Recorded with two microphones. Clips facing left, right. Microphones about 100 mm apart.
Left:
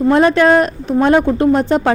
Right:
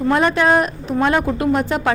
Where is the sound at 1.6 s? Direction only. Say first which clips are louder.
Left 5 dB; 30° left (ahead or behind).